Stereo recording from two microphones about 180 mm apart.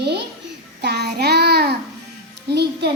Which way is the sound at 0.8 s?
65° right (ahead or behind).